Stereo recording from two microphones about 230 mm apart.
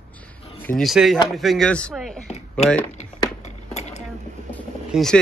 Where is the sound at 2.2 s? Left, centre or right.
Left.